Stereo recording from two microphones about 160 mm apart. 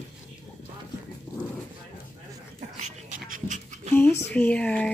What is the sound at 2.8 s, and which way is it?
Dog, 50° right (ahead or behind).